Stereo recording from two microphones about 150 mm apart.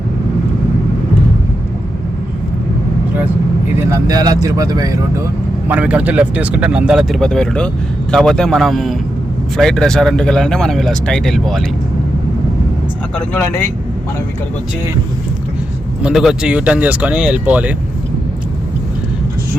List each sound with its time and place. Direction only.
3.8 s speech: 20° right (ahead or behind)
5.6 s speech: 10° right (ahead or behind)
13.1 s speech: 15° left (ahead or behind)
16.0 s speech: 5° right (ahead or behind)